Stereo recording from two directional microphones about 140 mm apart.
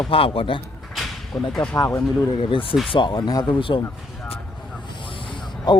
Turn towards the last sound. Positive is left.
turn(degrees=30)  # may be behind; listen again after turning